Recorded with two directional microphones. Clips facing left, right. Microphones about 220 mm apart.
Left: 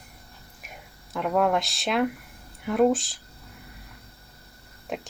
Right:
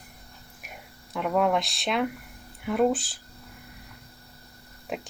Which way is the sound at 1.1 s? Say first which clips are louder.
Left 1 dB; centre (ahead or behind).